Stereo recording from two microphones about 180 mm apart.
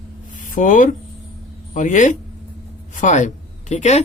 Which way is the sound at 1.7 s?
45° left (ahead or behind).